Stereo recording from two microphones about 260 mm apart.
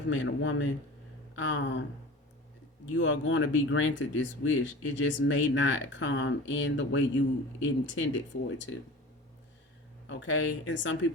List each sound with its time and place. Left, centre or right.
0.1 s speech: left
2.9 s speech: left
10.1 s speech: left